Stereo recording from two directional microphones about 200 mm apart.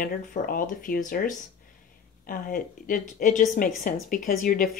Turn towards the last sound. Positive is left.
turn(degrees=45)  # may be behind; listen again after turning